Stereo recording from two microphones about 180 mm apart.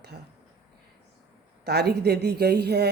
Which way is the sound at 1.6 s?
65° right (ahead or behind).